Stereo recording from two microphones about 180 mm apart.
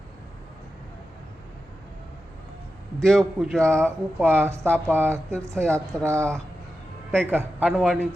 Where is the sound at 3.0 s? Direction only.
Centre (ahead or behind).